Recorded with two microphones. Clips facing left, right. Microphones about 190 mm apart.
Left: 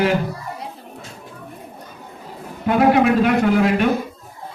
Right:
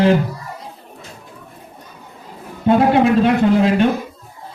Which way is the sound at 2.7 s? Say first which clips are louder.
Right 2 dB; 30° right (ahead or behind).